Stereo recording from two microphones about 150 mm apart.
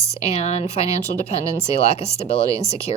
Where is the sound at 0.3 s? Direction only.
50° left (ahead or behind).